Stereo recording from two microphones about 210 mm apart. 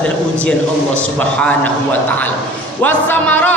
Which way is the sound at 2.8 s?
10° left (ahead or behind).